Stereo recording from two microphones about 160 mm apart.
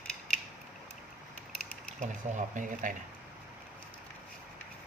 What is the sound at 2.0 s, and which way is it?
Speech, 50° right (ahead or behind).